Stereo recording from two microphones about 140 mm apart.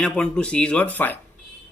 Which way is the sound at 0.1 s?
5° left (ahead or behind).